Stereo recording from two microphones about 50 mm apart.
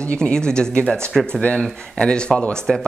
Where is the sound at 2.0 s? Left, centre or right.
Centre.